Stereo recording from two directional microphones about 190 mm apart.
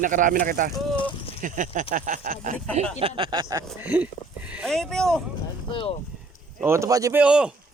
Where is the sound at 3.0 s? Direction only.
30° right (ahead or behind).